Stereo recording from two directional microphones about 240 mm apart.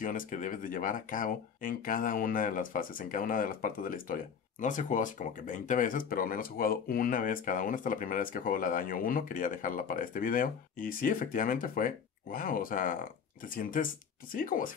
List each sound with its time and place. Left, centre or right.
0.0 s speech: left